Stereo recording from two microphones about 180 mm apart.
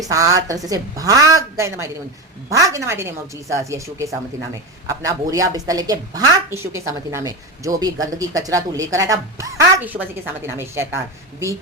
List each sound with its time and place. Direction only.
0.0 s a woman's voice: 20° right (ahead or behind)